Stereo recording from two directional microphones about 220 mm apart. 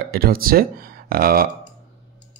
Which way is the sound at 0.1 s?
40° right (ahead or behind).